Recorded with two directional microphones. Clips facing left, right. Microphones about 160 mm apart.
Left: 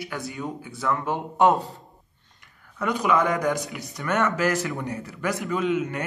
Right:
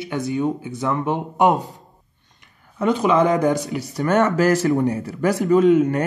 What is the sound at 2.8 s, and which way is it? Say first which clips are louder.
Speech: right 5 dB; 25° right (ahead or behind).